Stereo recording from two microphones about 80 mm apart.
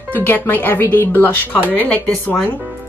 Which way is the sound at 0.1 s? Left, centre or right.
Left.